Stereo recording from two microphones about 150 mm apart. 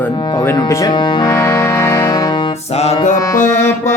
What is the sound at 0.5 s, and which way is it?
Music, 25° left (ahead or behind).